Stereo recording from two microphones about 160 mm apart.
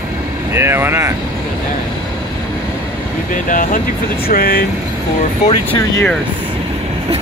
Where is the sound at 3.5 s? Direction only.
60° left (ahead or behind).